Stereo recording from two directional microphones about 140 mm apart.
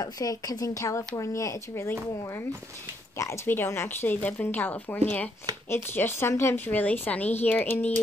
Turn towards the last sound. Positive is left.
turn(degrees=10)  # may be behind; listen again after turning